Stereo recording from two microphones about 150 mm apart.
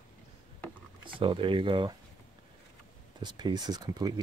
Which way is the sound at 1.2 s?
35° right (ahead or behind).